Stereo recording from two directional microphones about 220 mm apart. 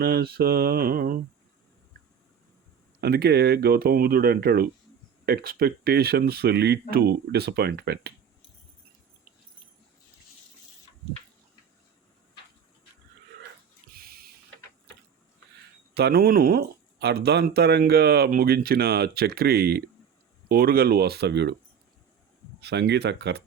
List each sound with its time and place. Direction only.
0.0 s speech: 45° right (ahead or behind)
3.0 s speech: 45° right (ahead or behind)
13.9 s a sound: 45° right (ahead or behind)
16.0 s speech: 45° right (ahead or behind)
22.6 s speech: 50° right (ahead or behind)